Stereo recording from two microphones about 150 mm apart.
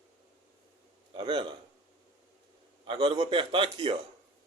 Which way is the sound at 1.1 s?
30° right (ahead or behind).